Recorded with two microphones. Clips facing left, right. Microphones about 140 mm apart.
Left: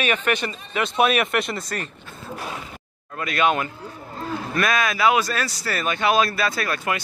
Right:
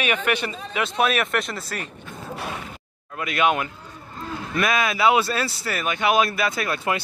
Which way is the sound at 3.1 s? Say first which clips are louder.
Even; 15° right (ahead or behind).